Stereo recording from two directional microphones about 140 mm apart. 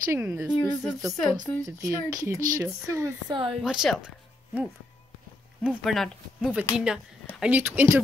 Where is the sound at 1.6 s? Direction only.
25° right (ahead or behind).